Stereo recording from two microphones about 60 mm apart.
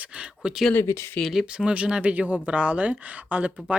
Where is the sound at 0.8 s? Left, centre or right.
Left.